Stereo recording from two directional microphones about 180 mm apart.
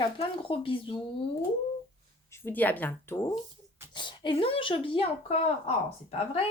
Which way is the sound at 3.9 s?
25° left (ahead or behind).